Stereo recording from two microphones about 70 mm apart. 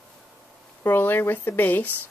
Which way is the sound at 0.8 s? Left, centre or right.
Left.